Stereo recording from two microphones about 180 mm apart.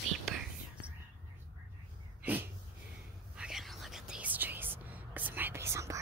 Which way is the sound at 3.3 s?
5° right (ahead or behind).